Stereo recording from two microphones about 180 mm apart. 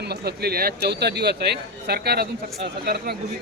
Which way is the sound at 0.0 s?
65° right (ahead or behind).